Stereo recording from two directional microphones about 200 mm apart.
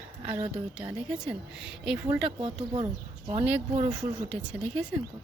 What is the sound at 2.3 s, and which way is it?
Speech, 25° right (ahead or behind).